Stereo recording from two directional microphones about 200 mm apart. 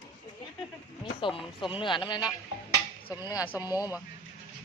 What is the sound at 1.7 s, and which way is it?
Speech, 25° left (ahead or behind).